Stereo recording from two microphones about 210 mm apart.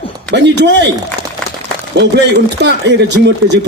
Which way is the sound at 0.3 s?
55° right (ahead or behind).